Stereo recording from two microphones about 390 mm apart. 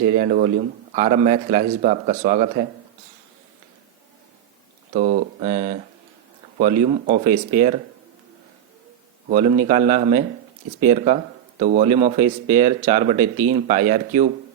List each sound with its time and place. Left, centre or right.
0.2 s speech: centre
4.9 s speech: centre
9.3 s speech: centre